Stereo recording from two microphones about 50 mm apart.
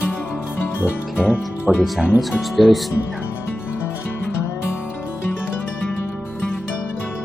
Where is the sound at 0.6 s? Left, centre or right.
Left.